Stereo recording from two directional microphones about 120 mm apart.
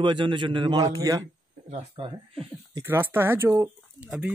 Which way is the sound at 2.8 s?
20° right (ahead or behind).